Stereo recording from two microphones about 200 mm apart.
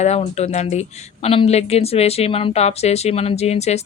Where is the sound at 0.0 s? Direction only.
35° left (ahead or behind).